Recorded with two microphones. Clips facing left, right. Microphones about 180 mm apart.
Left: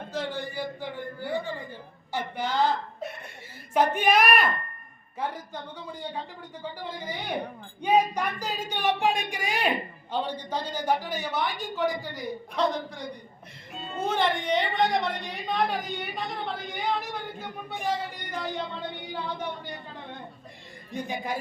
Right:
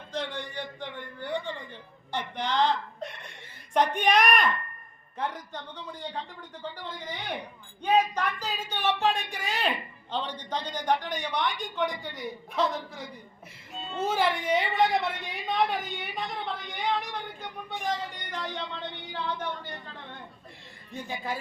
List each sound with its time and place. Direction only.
0.1 s a sound: 5° left (ahead or behind)
2.3 s speech: 5° left (ahead or behind)
3.9 s a woman's voice: 5° left (ahead or behind)
20.9 s speech: 15° left (ahead or behind)